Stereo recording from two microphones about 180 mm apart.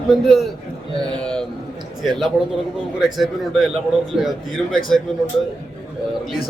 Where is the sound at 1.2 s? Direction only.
5° left (ahead or behind).